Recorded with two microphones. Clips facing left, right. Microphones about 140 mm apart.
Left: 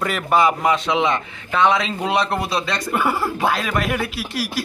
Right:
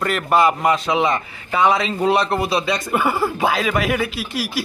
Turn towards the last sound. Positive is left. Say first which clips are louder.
# right 1 dB
turn(degrees=0)  # may be behind; listen again after turning